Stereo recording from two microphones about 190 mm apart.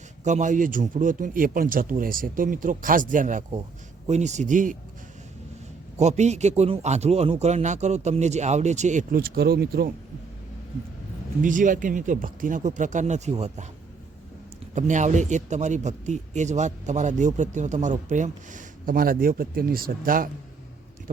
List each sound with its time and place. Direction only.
0.3 s a man's voice: 40° right (ahead or behind)
6.0 s speech: 35° right (ahead or behind); by 9.9 s 55° right (ahead or behind)
11.4 s a man's voice: 45° right (ahead or behind)
14.8 s speech: 40° right (ahead or behind)